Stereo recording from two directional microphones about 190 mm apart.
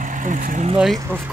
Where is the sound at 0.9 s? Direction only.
10° right (ahead or behind).